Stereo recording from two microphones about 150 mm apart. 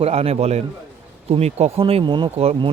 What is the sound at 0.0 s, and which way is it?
Speech, 45° right (ahead or behind).